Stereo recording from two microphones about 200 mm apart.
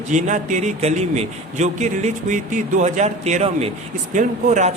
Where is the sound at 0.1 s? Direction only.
40° right (ahead or behind).